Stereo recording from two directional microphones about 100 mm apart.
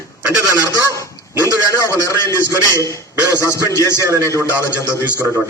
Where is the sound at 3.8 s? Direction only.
30° right (ahead or behind).